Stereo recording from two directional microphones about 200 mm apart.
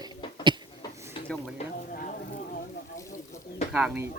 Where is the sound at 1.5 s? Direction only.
40° left (ahead or behind).